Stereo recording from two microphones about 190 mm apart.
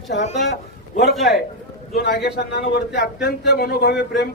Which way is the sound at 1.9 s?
55° left (ahead or behind).